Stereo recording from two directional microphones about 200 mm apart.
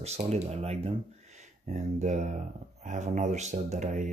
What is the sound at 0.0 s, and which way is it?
Speech, 35° right (ahead or behind).